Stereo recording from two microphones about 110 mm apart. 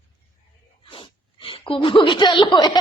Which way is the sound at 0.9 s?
50° left (ahead or behind).